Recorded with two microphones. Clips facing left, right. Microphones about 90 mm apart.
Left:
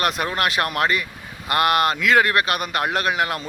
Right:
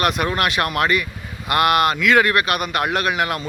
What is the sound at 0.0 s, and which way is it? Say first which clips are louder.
A man's voice: right 2 dB; 30° left (ahead or behind).